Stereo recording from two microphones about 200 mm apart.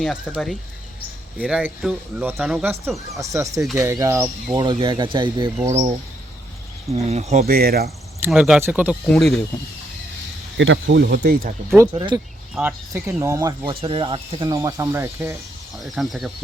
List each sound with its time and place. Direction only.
0.0 s speech: centre (ahead or behind); by 5.5 s 25° right (ahead or behind)
6.9 s speech: 30° right (ahead or behind); by 7.9 s 50° right (ahead or behind)
8.2 s speech: 5° right (ahead or behind)
10.6 s speech: 70° right (ahead or behind); by 11.5 s 50° right (ahead or behind)
11.9 s speech: 25° right (ahead or behind)
12.5 s speech: 10° right (ahead or behind)
13.7 s speech: 25° right (ahead or behind)
15.8 s speech: centre (ahead or behind)